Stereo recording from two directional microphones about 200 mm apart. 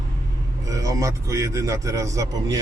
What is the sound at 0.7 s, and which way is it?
Speech, 15° right (ahead or behind).